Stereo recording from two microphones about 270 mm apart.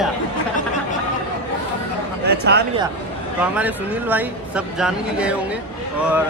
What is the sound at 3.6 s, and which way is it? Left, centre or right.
Speech, centre.